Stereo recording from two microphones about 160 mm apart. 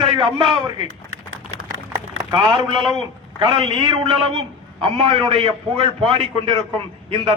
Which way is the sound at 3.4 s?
30° right (ahead or behind).